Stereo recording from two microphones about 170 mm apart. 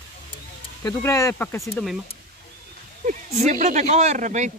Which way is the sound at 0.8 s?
15° left (ahead or behind).